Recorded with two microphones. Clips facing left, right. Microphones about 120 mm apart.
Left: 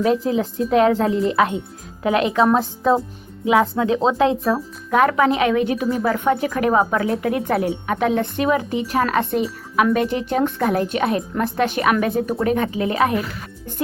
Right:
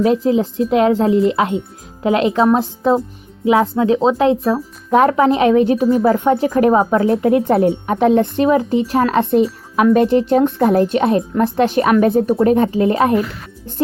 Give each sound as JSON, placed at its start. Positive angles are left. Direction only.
{"t": 0.0, "sound": "a woman's voice", "side_deg": -30}
{"t": 6.0, "sound": "a woman's voice", "side_deg": -20}